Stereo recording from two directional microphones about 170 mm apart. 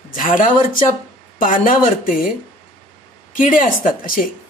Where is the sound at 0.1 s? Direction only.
50° left (ahead or behind).